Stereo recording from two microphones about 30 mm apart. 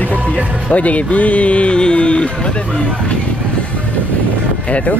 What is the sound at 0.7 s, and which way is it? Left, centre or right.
Speech, left.